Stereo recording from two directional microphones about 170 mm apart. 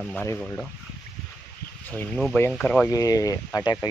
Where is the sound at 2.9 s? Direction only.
20° left (ahead or behind).